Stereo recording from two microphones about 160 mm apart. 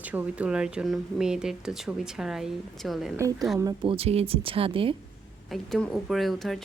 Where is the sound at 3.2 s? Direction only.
20° right (ahead or behind).